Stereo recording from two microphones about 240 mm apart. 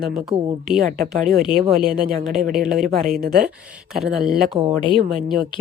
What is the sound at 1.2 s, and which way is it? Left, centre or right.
Speech, right.